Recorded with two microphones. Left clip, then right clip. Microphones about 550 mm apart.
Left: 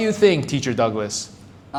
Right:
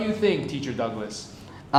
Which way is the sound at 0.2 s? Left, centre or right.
Left.